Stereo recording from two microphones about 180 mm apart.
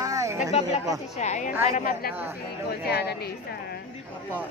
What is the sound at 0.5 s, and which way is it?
A woman's voice, 35° left (ahead or behind).